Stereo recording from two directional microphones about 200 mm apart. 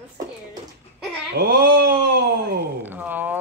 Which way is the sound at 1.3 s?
50° right (ahead or behind).